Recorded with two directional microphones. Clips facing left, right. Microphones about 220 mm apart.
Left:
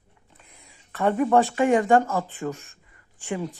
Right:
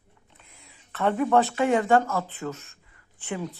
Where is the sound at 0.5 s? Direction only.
10° left (ahead or behind).